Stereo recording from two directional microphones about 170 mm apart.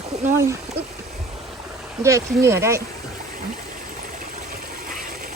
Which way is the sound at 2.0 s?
15° right (ahead or behind).